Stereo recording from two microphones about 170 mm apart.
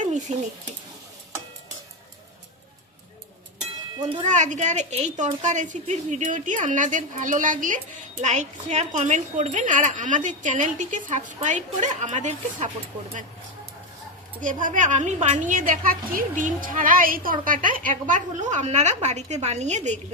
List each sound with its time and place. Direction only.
0.0 s a sound: 45° right (ahead or behind)
4.3 s a woman's voice: 45° right (ahead or behind)
14.4 s a woman's voice: 50° right (ahead or behind)